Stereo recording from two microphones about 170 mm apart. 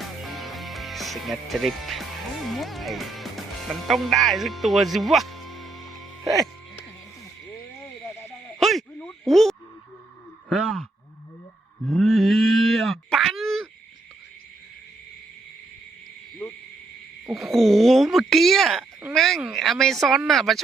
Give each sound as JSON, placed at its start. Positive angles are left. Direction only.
{"t": 0.0, "sound": "music", "side_deg": 0}
{"t": 2.5, "sound": "speech", "side_deg": 0}
{"t": 6.2, "sound": "music", "side_deg": 0}
{"t": 8.0, "sound": "owl", "side_deg": 10}
{"t": 10.5, "sound": "speech", "side_deg": 0}
{"t": 11.9, "sound": "a sound", "side_deg": 0}
{"t": 17.2, "sound": "a sound", "side_deg": 0}